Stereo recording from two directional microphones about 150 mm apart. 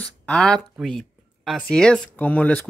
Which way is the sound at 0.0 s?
5° left (ahead or behind).